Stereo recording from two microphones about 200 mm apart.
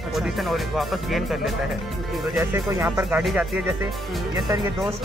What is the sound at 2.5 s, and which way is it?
Speech, 15° right (ahead or behind).